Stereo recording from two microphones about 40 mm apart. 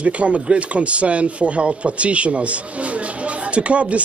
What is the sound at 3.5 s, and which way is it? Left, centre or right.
Speech, right.